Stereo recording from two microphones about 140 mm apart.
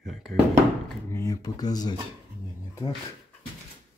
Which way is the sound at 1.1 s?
20° left (ahead or behind).